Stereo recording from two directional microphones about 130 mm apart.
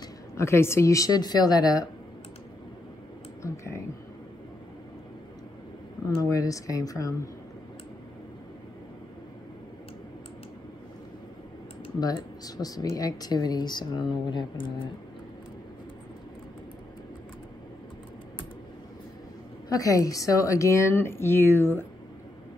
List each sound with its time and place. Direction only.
0.4 s a woman's voice: 20° left (ahead or behind)
3.4 s a woman's voice: 20° left (ahead or behind)
6.0 s a woman's voice: 25° left (ahead or behind)
12.0 s speech: 30° left (ahead or behind)
19.7 s a woman's voice: 25° left (ahead or behind)